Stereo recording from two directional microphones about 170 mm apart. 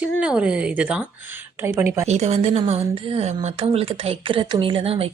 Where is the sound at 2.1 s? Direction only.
40° right (ahead or behind).